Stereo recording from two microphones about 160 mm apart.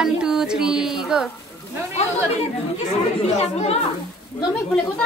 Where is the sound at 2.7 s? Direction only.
40° left (ahead or behind).